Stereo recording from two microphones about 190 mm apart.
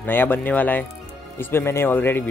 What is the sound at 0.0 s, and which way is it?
Speech, 10° left (ahead or behind).